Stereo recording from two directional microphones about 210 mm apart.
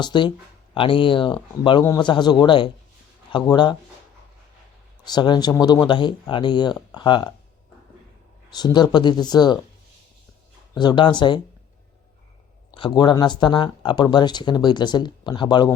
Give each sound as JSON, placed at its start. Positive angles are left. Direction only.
{"t": 0.0, "sound": "speech", "side_deg": 20}
{"t": 5.0, "sound": "speech", "side_deg": 20}
{"t": 8.4, "sound": "speech", "side_deg": 20}
{"t": 10.8, "sound": "speech", "side_deg": 20}
{"t": 12.7, "sound": "speech", "side_deg": 20}